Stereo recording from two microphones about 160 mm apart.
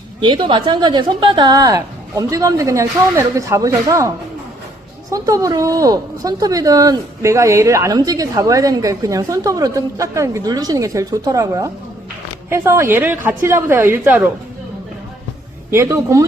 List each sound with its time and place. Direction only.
0.2 s speech: 30° right (ahead or behind)
5.1 s a woman's voice: 20° right (ahead or behind)
15.7 s a woman's voice: 15° right (ahead or behind)